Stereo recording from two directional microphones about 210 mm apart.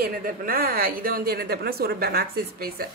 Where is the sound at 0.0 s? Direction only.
45° right (ahead or behind).